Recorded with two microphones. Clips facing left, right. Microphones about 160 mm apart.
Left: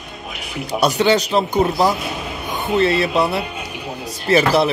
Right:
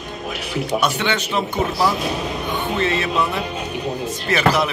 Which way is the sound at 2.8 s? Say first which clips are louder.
Left 4 dB; 35° left (ahead or behind).